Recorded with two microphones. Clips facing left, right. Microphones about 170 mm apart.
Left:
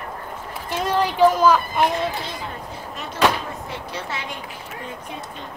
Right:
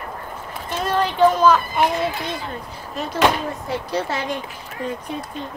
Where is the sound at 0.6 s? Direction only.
10° left (ahead or behind).